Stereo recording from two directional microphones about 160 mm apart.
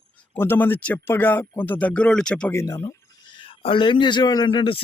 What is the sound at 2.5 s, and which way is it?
Speech, 15° left (ahead or behind).